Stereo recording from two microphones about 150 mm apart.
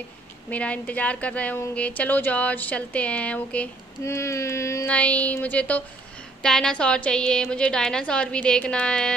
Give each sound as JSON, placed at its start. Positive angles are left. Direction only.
{"t": 0.5, "sound": "speech", "side_deg": 10}
{"t": 4.0, "sound": "a sound", "side_deg": 20}
{"t": 4.8, "sound": "a woman's voice", "side_deg": 10}